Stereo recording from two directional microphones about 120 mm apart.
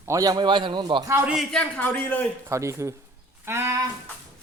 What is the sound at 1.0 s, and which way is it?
Speech, 20° right (ahead or behind).